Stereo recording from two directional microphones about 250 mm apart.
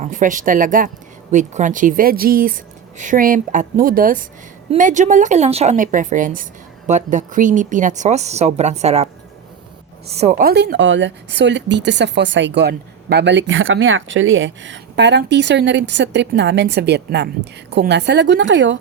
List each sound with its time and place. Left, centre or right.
0.0 s a woman's voice: right
10.1 s speech: right